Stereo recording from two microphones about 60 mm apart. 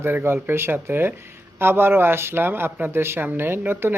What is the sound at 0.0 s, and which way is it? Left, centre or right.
A woman's voice, right.